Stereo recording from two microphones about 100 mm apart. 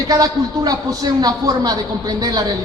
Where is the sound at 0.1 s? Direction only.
40° right (ahead or behind).